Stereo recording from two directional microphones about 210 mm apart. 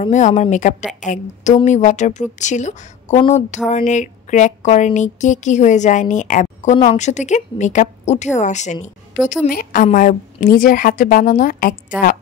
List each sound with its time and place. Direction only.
0.0 s speech: 30° left (ahead or behind)